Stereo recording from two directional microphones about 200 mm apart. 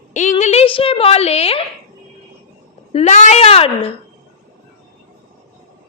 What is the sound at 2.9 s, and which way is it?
Speech, 35° left (ahead or behind).